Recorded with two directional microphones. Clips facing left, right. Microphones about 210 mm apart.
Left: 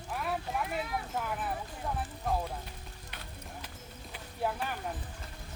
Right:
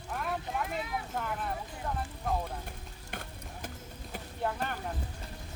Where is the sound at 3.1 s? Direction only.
50° right (ahead or behind).